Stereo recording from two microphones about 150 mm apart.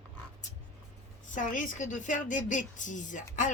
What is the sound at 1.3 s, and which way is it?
A woman's voice, 60° left (ahead or behind).